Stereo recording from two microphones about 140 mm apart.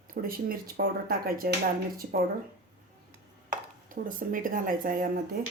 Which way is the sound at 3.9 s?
80° right.